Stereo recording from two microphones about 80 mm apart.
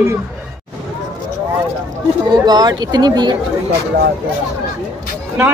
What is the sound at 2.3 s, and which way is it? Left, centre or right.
Speech, right.